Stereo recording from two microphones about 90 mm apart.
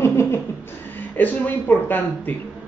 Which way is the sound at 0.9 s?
20° left (ahead or behind).